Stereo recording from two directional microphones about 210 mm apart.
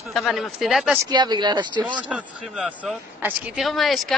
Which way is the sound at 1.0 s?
20° right (ahead or behind).